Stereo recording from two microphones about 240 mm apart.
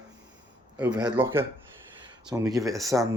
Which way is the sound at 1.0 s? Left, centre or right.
Centre.